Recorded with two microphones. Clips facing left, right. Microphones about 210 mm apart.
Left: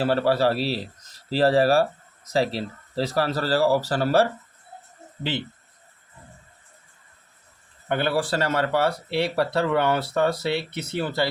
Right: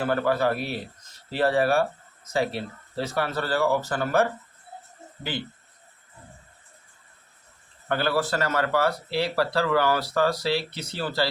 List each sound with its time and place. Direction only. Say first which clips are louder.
0.0 s speech: left 3 dB; 30° left (ahead or behind)
7.9 s speech: left 1 dB; 20° left (ahead or behind)